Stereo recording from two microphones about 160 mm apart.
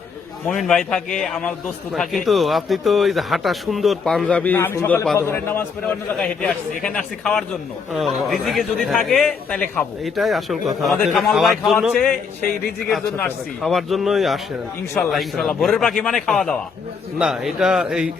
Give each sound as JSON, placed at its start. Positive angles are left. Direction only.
{"t": 0.4, "sound": "a man's voice", "side_deg": 5}
{"t": 13.6, "sound": "a man's voice", "side_deg": 0}